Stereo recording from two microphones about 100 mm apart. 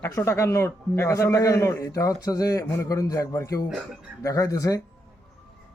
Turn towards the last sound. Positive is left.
turn(degrees=35)  # may be behind; listen again after turning